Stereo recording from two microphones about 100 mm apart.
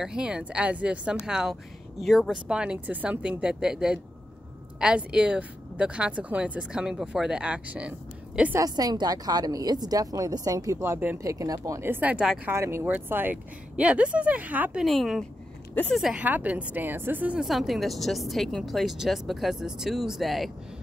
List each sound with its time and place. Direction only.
0.0 s speech: 5° right (ahead or behind)
8.5 s a woman's voice: 40° right (ahead or behind); by 11.1 s 20° right (ahead or behind)
11.2 s a woman's voice: 35° right (ahead or behind)
11.8 s speech: 20° right (ahead or behind)
12.4 s speech: 25° right (ahead or behind)
14.8 s speech: centre (ahead or behind); by 17.4 s 15° right (ahead or behind)
17.4 s speech: centre (ahead or behind)